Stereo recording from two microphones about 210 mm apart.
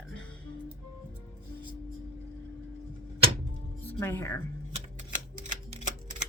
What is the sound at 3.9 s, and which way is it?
Speech, 10° left (ahead or behind).